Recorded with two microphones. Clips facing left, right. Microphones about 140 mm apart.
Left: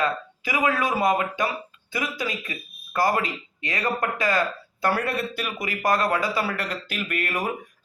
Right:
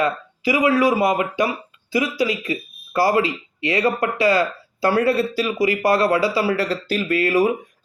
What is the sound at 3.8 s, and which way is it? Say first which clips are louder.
Speech: right 6 dB; 10° right (ahead or behind).